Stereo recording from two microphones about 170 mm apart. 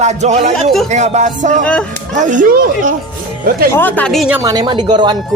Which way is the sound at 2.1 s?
45° right (ahead or behind).